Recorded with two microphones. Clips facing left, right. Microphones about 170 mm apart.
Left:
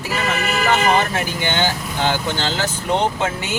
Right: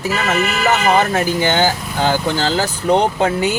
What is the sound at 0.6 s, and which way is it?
Speech, 45° right (ahead or behind).